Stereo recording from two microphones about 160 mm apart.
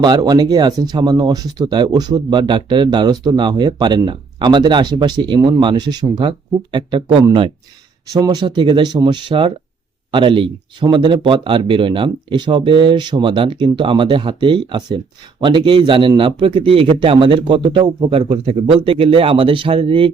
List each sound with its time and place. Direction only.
0.0 s speech: 25° right (ahead or behind)